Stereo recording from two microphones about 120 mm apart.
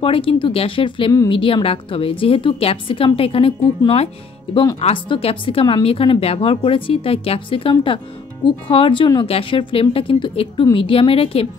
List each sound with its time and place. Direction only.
0.0 s a woman's voice: 50° left (ahead or behind)